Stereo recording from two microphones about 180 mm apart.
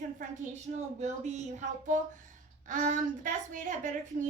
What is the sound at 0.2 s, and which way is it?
A woman's voice, 40° right (ahead or behind).